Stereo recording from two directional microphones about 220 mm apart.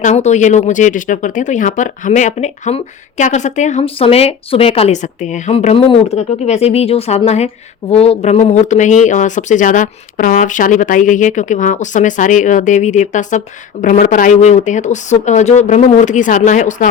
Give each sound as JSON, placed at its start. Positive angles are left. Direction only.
{"t": 0.0, "sound": "speech", "side_deg": 30}